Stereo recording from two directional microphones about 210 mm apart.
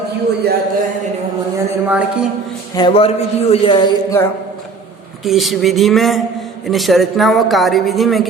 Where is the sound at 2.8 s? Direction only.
25° left (ahead or behind).